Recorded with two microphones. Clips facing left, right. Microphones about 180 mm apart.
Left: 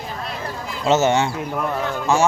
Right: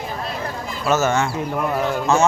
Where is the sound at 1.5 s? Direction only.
5° right (ahead or behind).